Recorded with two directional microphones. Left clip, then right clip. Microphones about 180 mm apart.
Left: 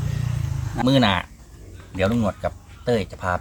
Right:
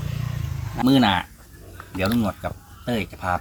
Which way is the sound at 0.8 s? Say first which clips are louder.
Even; 20° left (ahead or behind).